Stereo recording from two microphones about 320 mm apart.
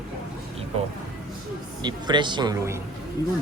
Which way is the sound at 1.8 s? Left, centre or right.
Centre.